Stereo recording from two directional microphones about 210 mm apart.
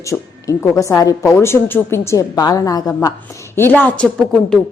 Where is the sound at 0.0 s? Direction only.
15° left (ahead or behind).